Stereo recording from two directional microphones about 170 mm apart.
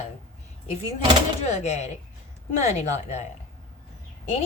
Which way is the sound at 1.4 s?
40° left (ahead or behind).